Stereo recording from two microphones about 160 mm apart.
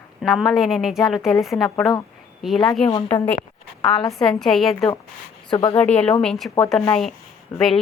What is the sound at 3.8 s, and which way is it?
Speech, 25° left (ahead or behind).